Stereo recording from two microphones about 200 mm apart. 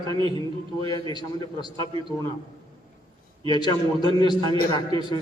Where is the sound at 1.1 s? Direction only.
20° left (ahead or behind).